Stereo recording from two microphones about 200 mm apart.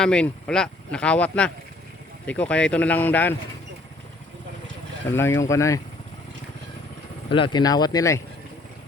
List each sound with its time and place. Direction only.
0.0 s speech: 5° left (ahead or behind)
5.1 s speech: 10° left (ahead or behind)
7.3 s speech: 25° left (ahead or behind)